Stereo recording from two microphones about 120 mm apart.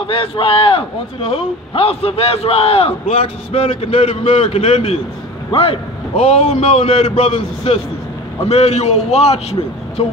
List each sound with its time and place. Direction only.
0.0 s a man's voice: 50° left (ahead or behind)